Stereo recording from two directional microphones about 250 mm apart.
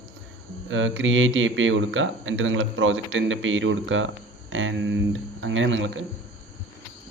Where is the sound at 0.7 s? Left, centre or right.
Right.